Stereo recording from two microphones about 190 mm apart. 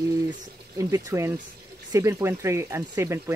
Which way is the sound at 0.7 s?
15° right (ahead or behind).